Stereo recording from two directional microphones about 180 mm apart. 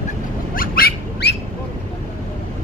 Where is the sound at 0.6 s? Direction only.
55° left (ahead or behind).